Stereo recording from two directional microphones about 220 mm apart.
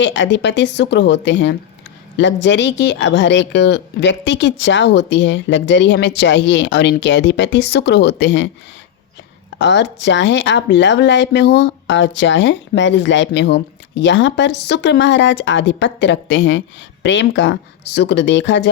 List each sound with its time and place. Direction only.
0.0 s a woman's voice: 55° left (ahead or behind)
9.6 s speech: 55° left (ahead or behind)